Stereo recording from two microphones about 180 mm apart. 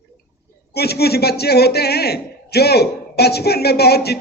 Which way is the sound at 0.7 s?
60° left (ahead or behind).